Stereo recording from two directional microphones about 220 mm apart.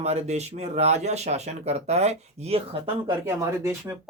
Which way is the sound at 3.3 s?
10° right (ahead or behind).